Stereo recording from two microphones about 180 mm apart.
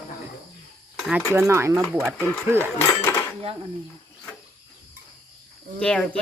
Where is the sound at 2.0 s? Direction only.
5° left (ahead or behind).